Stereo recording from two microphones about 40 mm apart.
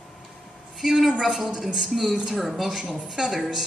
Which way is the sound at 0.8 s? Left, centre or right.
Centre.